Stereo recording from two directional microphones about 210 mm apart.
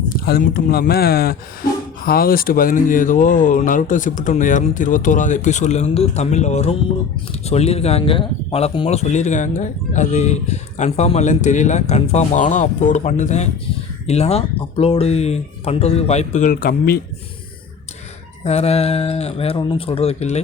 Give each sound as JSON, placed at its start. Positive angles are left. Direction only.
{"t": 0.1, "sound": "speech", "side_deg": 45}
{"t": 18.4, "sound": "speech", "side_deg": 30}